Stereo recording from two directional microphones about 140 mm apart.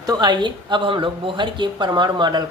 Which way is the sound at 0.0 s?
30° right (ahead or behind).